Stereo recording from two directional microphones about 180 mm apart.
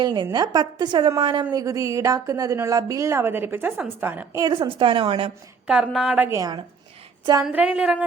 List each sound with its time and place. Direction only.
0.0 s a woman's voice: 25° right (ahead or behind)
4.5 s a woman's voice: 30° right (ahead or behind)
5.6 s a woman's voice: 5° right (ahead or behind)
7.4 s a woman's voice: 5° right (ahead or behind)